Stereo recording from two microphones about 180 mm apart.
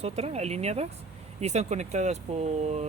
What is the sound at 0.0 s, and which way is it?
Speech, 35° right (ahead or behind).